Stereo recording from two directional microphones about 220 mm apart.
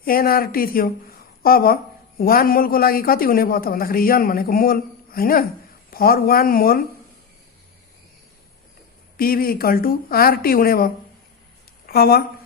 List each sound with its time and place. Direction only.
0.0 s a woman's voice: 40° left (ahead or behind)
9.1 s a woman's voice: 40° left (ahead or behind)